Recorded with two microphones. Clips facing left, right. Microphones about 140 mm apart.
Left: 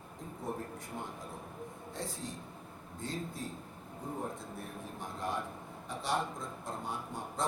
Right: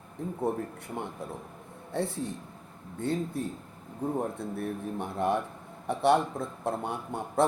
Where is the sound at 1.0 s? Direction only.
65° right (ahead or behind).